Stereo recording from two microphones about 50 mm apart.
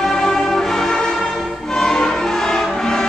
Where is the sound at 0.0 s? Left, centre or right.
Centre.